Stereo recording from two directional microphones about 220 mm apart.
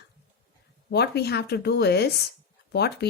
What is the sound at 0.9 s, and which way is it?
Speech, 45° left (ahead or behind).